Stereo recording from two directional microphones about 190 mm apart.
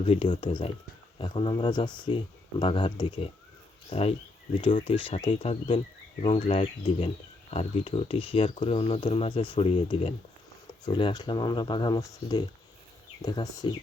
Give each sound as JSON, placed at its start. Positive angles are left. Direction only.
{"t": 0.0, "sound": "speech", "side_deg": 30}